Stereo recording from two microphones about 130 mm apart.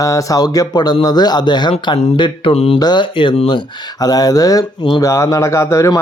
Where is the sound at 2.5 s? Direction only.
50° left (ahead or behind).